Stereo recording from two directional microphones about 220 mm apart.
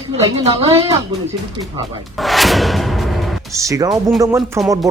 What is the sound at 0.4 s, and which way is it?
Speech, 25° right (ahead or behind).